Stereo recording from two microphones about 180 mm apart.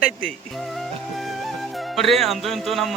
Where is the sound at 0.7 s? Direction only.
Centre (ahead or behind).